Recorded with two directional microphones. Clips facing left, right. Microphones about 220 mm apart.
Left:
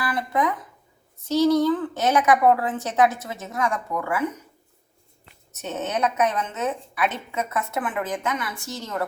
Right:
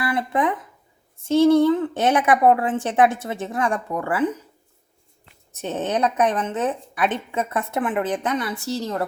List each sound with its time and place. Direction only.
0.0 s a woman's voice: 25° right (ahead or behind)
5.5 s a woman's voice: 30° right (ahead or behind)